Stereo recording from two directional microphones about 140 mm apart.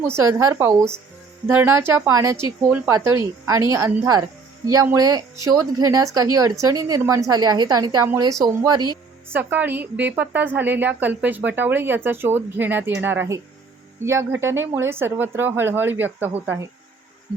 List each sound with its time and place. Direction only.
0.2 s a woman's voice: 20° right (ahead or behind)
2.6 s a woman's voice: 10° right (ahead or behind)
2.9 s a woman's voice: 20° right (ahead or behind)
9.3 s a woman's voice: 15° right (ahead or behind)